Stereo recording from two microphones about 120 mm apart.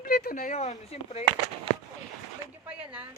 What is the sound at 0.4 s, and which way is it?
Speech, 75° left (ahead or behind).